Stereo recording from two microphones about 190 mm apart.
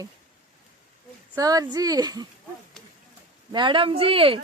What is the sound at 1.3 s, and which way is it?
Speech, 20° right (ahead or behind).